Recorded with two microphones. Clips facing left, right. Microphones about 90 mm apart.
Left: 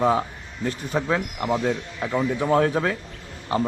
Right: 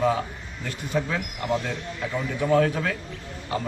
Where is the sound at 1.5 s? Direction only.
20° left (ahead or behind).